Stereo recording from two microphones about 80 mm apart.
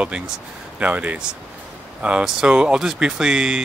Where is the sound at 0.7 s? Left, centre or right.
Centre.